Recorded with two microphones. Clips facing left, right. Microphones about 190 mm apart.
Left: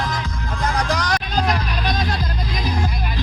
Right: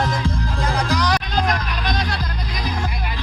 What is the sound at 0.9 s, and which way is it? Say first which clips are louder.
Music: right 2 dB; 45° left (ahead or behind).